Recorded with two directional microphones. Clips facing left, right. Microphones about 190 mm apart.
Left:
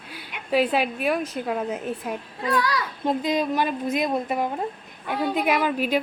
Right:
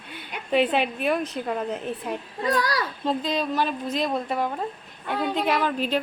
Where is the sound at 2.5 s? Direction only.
40° right (ahead or behind).